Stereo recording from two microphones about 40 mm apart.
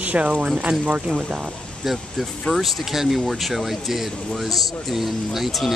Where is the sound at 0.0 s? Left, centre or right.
Right.